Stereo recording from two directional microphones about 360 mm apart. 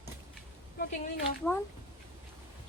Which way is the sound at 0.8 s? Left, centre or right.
Left.